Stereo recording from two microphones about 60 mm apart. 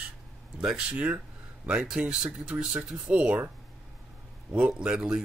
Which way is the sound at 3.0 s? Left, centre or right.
Right.